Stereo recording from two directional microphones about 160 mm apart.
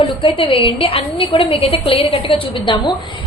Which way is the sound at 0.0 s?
30° left (ahead or behind).